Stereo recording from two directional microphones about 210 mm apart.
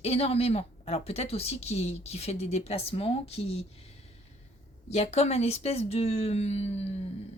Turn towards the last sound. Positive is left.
turn(degrees=30)  # may be behind; listen again after turning